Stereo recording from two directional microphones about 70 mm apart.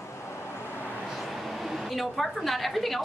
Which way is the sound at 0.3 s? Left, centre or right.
Left.